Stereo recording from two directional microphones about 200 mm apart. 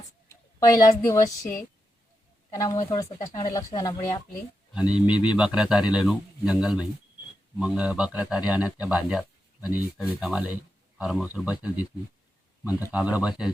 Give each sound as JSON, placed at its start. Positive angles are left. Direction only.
{"t": 0.3, "sound": "speech", "side_deg": 15}
{"t": 2.6, "sound": "speech", "side_deg": 20}
{"t": 4.7, "sound": "a man's voice", "side_deg": -5}